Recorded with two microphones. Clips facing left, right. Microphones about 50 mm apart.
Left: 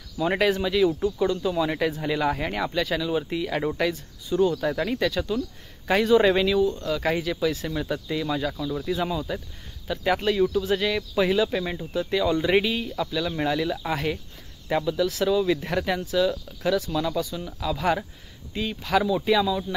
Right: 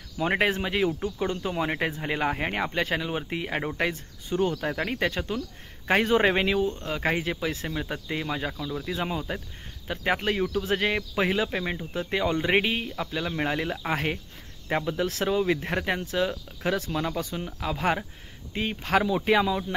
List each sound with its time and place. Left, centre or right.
0.2 s speech: right
4.6 s speech: right
8.5 s speech: centre
8.8 s speech: right